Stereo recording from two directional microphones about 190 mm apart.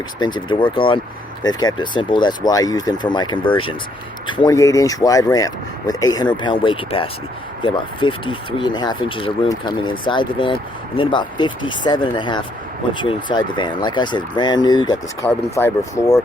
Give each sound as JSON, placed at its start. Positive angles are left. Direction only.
{"t": 0.2, "sound": "speech", "side_deg": 25}